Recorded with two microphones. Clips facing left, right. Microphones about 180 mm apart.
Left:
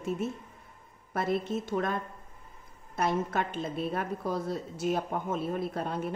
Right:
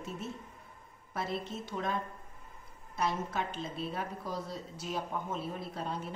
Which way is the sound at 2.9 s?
55° left (ahead or behind).